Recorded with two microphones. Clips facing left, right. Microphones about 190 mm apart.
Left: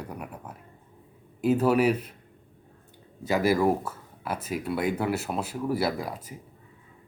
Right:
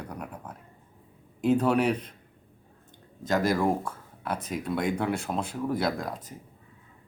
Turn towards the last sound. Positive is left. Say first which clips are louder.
# even
turn(degrees=10)  # may be behind; listen again after turning